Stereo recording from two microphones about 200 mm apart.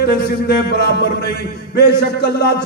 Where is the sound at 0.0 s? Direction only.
50° left (ahead or behind).